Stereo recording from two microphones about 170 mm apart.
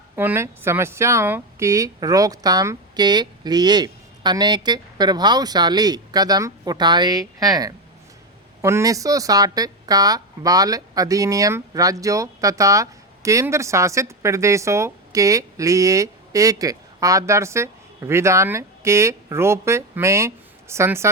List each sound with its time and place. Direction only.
0.2 s speech: 15° right (ahead or behind)